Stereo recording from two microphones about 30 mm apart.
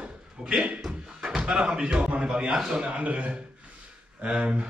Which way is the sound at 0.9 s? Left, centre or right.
Right.